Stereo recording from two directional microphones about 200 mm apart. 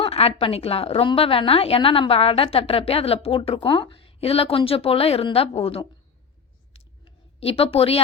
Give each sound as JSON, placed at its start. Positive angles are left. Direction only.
{"t": 0.0, "sound": "a woman's voice", "side_deg": 30}
{"t": 6.7, "sound": "clicking", "side_deg": 30}